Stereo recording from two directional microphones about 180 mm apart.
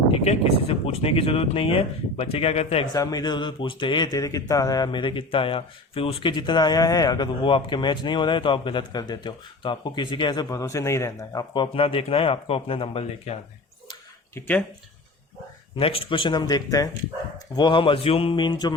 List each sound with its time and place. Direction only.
0.1 s speech: 30° left (ahead or behind)
2.8 s speech: 20° left (ahead or behind)
14.3 s speech: 10° left (ahead or behind)
15.8 s speech: 30° left (ahead or behind)